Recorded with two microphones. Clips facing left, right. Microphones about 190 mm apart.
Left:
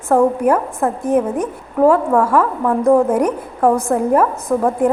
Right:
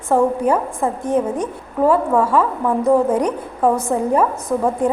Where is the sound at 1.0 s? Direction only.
5° left (ahead or behind).